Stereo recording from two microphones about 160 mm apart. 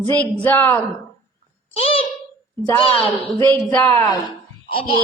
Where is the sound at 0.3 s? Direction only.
10° left (ahead or behind).